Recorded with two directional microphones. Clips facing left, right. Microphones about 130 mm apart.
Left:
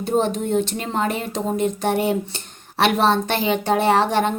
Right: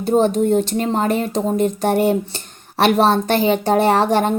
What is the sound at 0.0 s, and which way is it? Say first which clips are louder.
Speech: right 5 dB; 40° right (ahead or behind).